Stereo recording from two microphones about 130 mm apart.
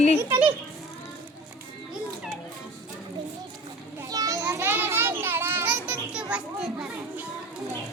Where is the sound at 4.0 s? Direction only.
30° right (ahead or behind); by 7.2 s 5° right (ahead or behind).